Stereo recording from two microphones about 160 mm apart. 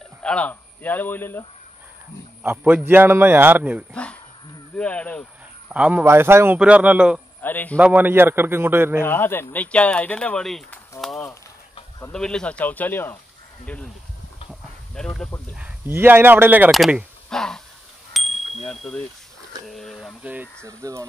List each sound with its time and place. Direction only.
0.2 s a man's voice: 5° left (ahead or behind)
2.4 s a man's voice: 10° right (ahead or behind)
3.9 s speech: 10° left (ahead or behind)
5.7 s a man's voice: 5° right (ahead or behind)
7.4 s speech: 10° left (ahead or behind)
7.8 s a man's voice: 10° right (ahead or behind)
9.0 s speech: 15° left (ahead or behind)
14.5 s a sound: 5° left (ahead or behind)
15.5 s a man's voice: 10° right (ahead or behind)
16.7 s a sound: centre (ahead or behind)
18.1 s bicycle bell: centre (ahead or behind)
18.7 s speech: 5° left (ahead or behind); by 20.4 s 10° right (ahead or behind)
20.6 s speech: 20° right (ahead or behind)